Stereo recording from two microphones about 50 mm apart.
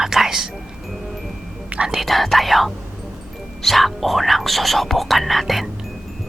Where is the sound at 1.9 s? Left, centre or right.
Centre.